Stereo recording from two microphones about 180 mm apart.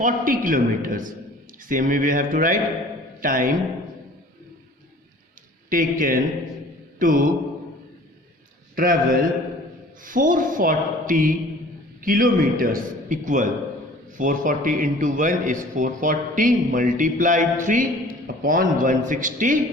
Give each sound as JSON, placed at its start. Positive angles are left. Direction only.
{"t": 0.0, "sound": "a man's voice", "side_deg": -50}
{"t": 5.6, "sound": "a man's voice", "side_deg": -45}
{"t": 8.7, "sound": "a man's voice", "side_deg": -55}